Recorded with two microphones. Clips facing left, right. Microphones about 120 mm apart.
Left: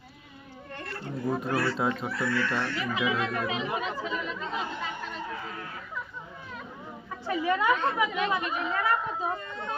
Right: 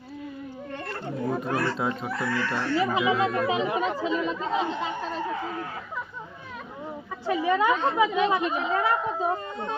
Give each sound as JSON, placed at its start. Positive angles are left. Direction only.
{"t": 0.9, "sound": "speech", "side_deg": 0}
{"t": 1.5, "sound": "speech", "side_deg": -45}
{"t": 7.3, "sound": "speech", "side_deg": -20}